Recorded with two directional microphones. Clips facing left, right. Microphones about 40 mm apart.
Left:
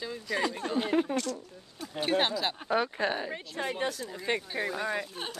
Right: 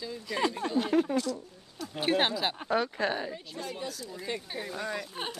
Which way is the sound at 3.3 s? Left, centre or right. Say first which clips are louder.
Left 4 dB; left.